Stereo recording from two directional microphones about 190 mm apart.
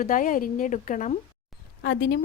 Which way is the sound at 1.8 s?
55° left (ahead or behind).